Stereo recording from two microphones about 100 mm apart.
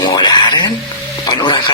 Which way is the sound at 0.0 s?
45° left (ahead or behind).